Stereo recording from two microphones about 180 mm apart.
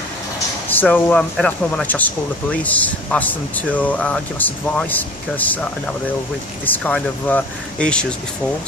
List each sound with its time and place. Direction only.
0.7 s speech: 10° left (ahead or behind)